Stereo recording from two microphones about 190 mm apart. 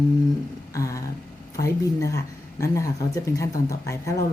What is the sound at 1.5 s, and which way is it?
Speech, 15° left (ahead or behind).